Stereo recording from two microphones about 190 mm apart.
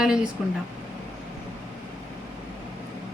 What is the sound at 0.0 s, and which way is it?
Speech, 5° right (ahead or behind).